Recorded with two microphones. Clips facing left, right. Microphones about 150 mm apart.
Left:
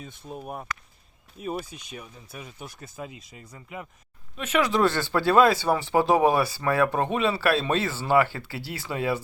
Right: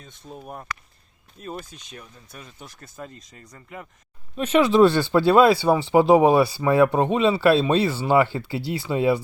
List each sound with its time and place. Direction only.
0.0 s speech: 10° left (ahead or behind)
4.4 s speech: 30° right (ahead or behind)